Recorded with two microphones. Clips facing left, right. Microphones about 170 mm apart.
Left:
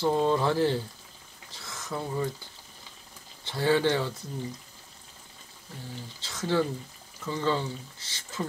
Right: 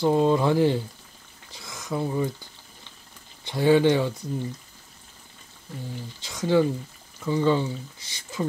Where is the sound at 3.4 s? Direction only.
15° right (ahead or behind).